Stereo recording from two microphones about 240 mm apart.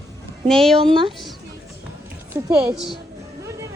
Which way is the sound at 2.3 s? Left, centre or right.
Centre.